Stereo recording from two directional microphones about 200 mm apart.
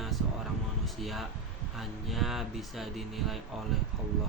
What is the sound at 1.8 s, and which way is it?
Speech, centre (ahead or behind).